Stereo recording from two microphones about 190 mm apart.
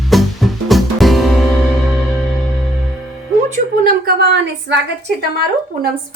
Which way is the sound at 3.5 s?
50° right (ahead or behind).